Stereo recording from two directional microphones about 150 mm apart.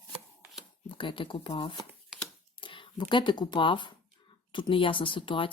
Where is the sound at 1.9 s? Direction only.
5° right (ahead or behind).